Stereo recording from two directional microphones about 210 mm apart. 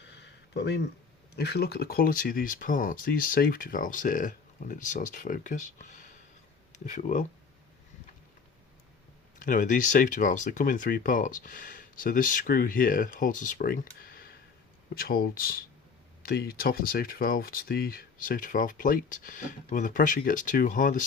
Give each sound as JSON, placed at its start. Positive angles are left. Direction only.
{"t": 0.0, "sound": "a sound", "side_deg": 55}
{"t": 1.4, "sound": "speech", "side_deg": 50}
{"t": 9.4, "sound": "speech", "side_deg": 40}